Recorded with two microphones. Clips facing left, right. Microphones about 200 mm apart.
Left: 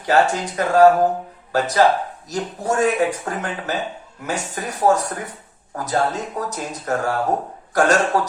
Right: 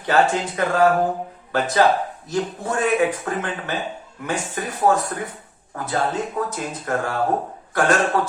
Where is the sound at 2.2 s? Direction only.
40° left (ahead or behind).